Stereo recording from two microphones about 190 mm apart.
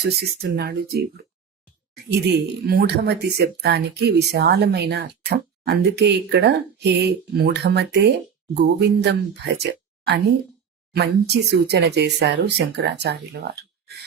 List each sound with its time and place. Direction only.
0.1 s speech: 60° right (ahead or behind)
2.0 s speech: 60° right (ahead or behind)
10.9 s speech: 60° right (ahead or behind)